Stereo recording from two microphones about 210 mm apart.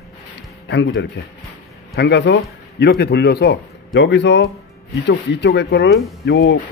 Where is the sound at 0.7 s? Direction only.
55° left (ahead or behind).